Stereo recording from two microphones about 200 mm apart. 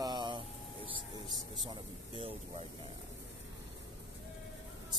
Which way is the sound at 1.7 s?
25° right (ahead or behind).